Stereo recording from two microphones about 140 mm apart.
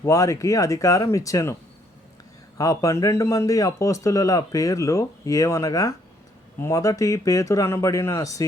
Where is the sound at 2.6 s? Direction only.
25° left (ahead or behind).